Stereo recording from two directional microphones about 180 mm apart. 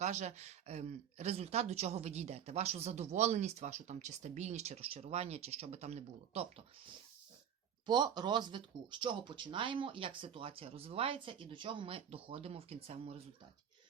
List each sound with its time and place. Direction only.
0.0 s speech: 40° right (ahead or behind)
7.9 s speech: 25° right (ahead or behind)